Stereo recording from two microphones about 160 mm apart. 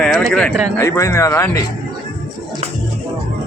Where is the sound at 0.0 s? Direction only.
10° left (ahead or behind).